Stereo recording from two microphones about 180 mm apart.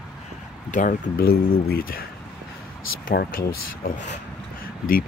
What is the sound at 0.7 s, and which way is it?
Speech, 45° left (ahead or behind).